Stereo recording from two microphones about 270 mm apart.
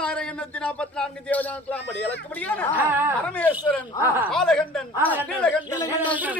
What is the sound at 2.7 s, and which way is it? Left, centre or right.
Speech, centre.